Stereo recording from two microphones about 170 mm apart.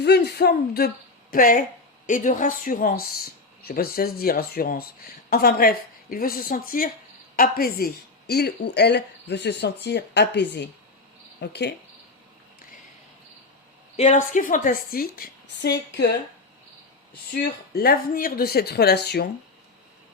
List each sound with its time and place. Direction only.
0.0 s speech: 75° left (ahead or behind)
1.3 s a woman's voice: 55° left (ahead or behind); by 11.7 s 85° left
13.9 s a woman's voice: 40° left (ahead or behind); by 16.1 s 75° left (ahead or behind)
17.3 s a woman's voice: 60° left (ahead or behind); by 19.3 s 75° left (ahead or behind)